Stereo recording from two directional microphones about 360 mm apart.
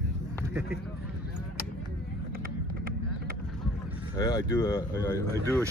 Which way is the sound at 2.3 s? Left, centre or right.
Right.